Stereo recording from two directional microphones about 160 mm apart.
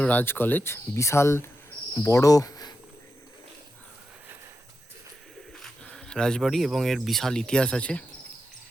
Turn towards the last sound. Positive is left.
turn(degrees=5)  # may be behind; listen again after turning